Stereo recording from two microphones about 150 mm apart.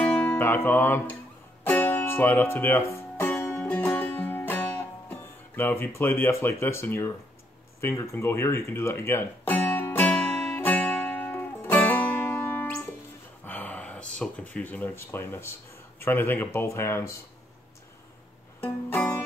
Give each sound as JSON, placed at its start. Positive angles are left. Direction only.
{"t": 0.0, "sound": "music", "side_deg": 10}
{"t": 5.9, "sound": "speech", "side_deg": 15}
{"t": 7.8, "sound": "music", "side_deg": 20}
{"t": 13.5, "sound": "speech", "side_deg": 10}
{"t": 18.6, "sound": "music", "side_deg": 15}